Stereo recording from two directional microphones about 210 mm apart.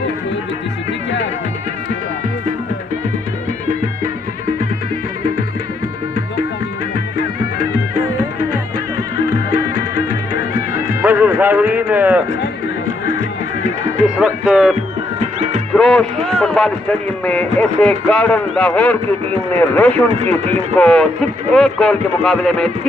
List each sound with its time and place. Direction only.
11.0 s music: 10° right (ahead or behind)
14.0 s speech: 5° right (ahead or behind)
15.1 s music: 30° right (ahead or behind)
15.7 s speech: 5° left (ahead or behind)